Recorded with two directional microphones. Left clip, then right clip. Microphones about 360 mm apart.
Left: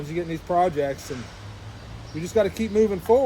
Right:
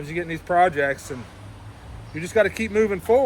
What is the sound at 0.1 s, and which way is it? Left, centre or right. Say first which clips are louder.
Speech: right 2 dB; centre.